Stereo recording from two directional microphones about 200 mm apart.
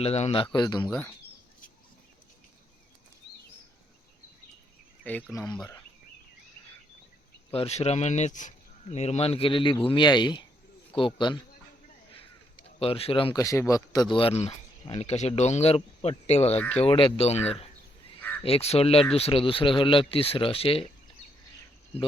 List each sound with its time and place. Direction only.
0.0 s speech: 30° left (ahead or behind)
5.3 s speech: 15° left (ahead or behind)
7.5 s speech: 30° left (ahead or behind)
12.8 s speech: 30° left (ahead or behind)
18.4 s speech: 30° left (ahead or behind)